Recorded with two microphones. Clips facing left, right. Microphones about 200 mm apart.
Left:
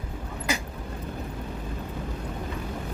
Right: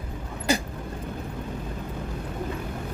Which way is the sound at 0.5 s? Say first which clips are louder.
Right 6 dB; 30° right (ahead or behind).